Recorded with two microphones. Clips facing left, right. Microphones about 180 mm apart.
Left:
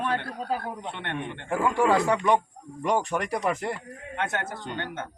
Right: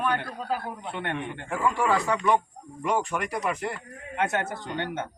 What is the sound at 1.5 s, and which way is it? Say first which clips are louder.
Speech: left 3 dB; 25° left (ahead or behind).